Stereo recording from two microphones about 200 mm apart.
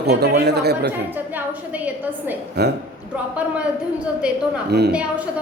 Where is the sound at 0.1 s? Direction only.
55° right (ahead or behind).